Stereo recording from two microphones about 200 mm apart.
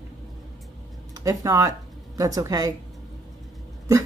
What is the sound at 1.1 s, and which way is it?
Speech, 15° right (ahead or behind).